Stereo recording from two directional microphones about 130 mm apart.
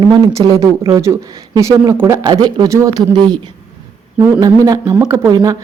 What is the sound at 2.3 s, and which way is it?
Speech, 35° right (ahead or behind).